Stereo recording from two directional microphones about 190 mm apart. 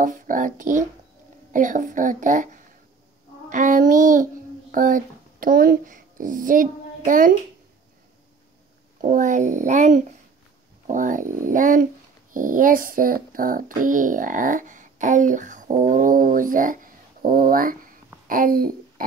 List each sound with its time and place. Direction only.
0.0 s a child's voice: 45° right (ahead or behind)
9.0 s a woman's voice: 45° right (ahead or behind)